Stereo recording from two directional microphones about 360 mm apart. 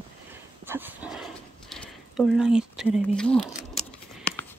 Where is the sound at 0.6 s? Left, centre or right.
Centre.